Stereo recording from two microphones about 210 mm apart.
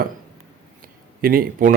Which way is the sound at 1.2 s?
45° right (ahead or behind).